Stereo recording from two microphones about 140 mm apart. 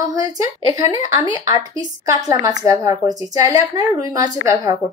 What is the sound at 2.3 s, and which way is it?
A woman's voice, 25° right (ahead or behind).